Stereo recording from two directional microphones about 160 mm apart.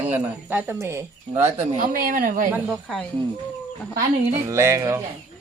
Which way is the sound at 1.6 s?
55° right (ahead or behind).